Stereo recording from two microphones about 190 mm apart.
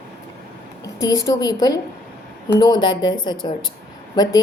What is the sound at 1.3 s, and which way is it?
A woman's voice, 20° left (ahead or behind).